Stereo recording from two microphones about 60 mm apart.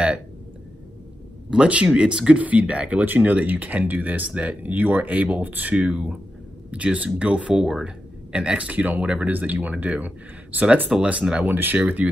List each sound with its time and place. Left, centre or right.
1.5 s speech: centre
11.1 s speech: centre
11.4 s speech: right